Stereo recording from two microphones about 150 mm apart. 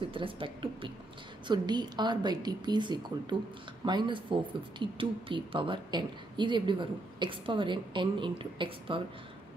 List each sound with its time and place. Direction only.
0.0 s a woman's voice: 35° right (ahead or behind)